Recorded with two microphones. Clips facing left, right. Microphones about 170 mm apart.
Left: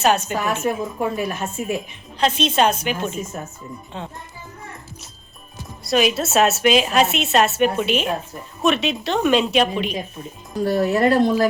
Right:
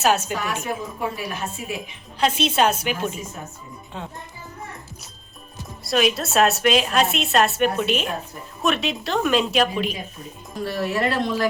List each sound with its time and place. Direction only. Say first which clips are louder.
0.0 s a woman's voice: left 2 dB; 5° right (ahead or behind)
0.3 s speech: left 5 dB; 45° left (ahead or behind)
2.1 s a woman's voice: left 1 dB; 10° right (ahead or behind)
5.8 s a woman's voice: left 2 dB; centre (ahead or behind)
10.6 s a woman's voice: left 6 dB; 40° left (ahead or behind)